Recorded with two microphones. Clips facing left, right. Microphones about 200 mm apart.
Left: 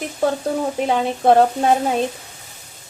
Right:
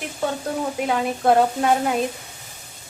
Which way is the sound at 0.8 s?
25° left (ahead or behind).